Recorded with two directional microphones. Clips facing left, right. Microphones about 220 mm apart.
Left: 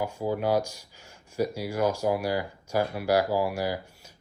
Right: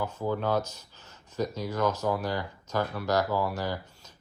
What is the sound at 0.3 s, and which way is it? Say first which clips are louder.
Speech: left 5 dB; 10° left (ahead or behind).